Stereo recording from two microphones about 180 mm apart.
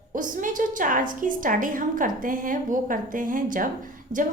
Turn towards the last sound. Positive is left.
turn(degrees=-50)  # may be behind; listen again after turning